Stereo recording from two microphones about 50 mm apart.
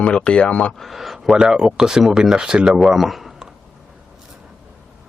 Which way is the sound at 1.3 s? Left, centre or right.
Centre.